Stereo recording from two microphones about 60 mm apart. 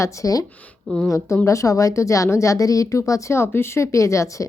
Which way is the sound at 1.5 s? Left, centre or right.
Left.